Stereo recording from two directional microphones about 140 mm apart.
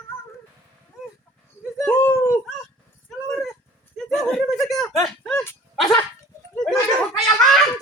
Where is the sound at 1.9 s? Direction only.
15° left (ahead or behind).